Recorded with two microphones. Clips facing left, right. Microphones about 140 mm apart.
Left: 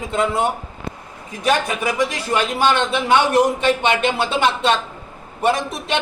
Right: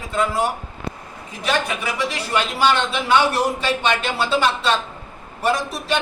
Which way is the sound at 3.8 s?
20° left (ahead or behind).